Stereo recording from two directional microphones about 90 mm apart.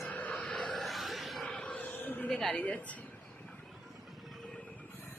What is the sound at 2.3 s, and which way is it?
Speech, 5° left (ahead or behind).